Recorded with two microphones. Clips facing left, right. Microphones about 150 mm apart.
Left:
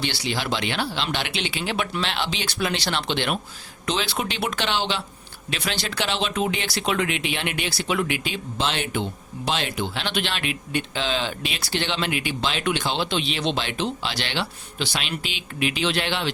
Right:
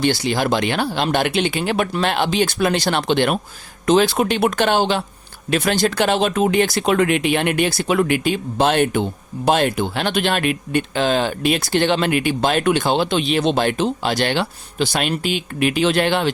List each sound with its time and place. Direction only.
0.0 s speech: 45° right (ahead or behind)